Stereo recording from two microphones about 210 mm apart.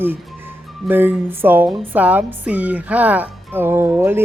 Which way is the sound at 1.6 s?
20° right (ahead or behind).